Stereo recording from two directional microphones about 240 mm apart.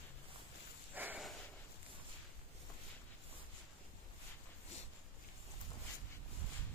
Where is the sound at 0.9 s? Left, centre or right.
Centre.